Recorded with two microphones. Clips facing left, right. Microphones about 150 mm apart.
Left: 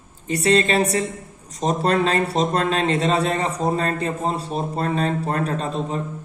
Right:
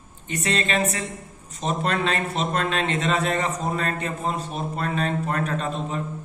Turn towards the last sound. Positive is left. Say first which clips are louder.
# left 2 dB
turn(degrees=35)  # may be behind; listen again after turning